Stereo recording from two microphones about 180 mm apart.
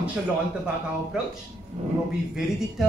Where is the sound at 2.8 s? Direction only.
Centre (ahead or behind).